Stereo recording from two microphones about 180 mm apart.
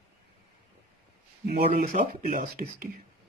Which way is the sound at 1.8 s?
50° right (ahead or behind).